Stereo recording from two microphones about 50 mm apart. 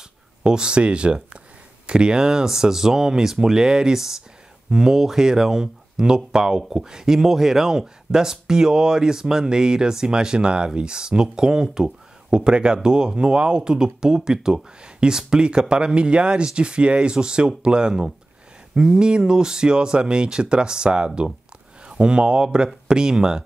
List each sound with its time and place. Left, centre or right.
0.4 s speech: centre